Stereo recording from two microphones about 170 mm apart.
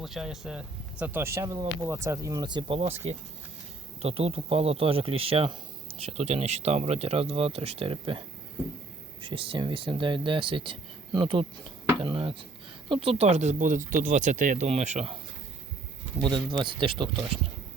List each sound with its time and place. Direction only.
0.0 s speech: centre (ahead or behind); by 3.0 s 35° right (ahead or behind)
4.0 s a man's voice: 35° right (ahead or behind)
9.3 s a man's voice: 30° right (ahead or behind)
16.2 s speech: 30° right (ahead or behind)